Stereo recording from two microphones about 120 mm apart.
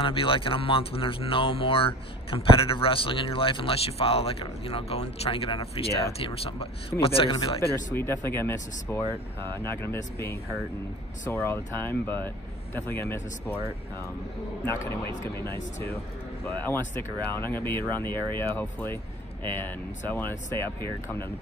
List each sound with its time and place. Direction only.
0.0 s speech: 45° left (ahead or behind)
7.9 s speech: 20° left (ahead or behind)
14.9 s speech: 20° left (ahead or behind)